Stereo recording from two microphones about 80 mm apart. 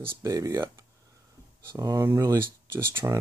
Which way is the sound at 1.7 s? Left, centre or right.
Right.